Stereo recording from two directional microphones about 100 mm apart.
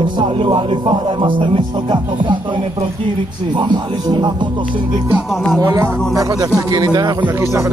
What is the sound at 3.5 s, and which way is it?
Speech, 50° right (ahead or behind).